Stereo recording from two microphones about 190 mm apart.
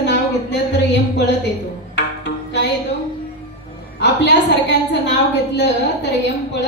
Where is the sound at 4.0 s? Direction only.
65° left (ahead or behind).